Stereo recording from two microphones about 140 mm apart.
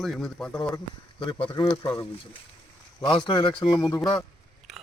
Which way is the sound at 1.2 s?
40° left (ahead or behind).